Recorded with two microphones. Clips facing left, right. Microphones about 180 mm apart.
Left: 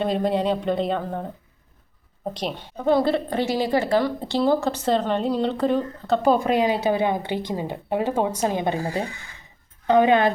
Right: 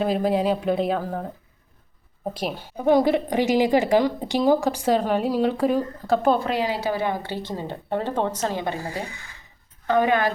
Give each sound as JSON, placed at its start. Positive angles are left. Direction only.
{"t": 0.0, "sound": "a woman's voice", "side_deg": -5}
{"t": 6.3, "sound": "speech", "side_deg": 15}